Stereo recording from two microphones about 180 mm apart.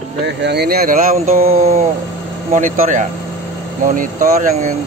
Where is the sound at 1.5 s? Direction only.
35° right (ahead or behind).